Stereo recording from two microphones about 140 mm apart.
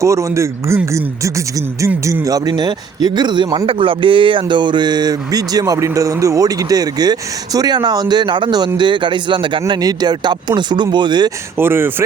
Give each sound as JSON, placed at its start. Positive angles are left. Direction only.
{"t": 0.0, "sound": "speech", "side_deg": -20}
{"t": 1.9, "sound": "speech", "side_deg": -15}
{"t": 2.2, "sound": "speech", "side_deg": -25}
{"t": 11.5, "sound": "speech", "side_deg": -15}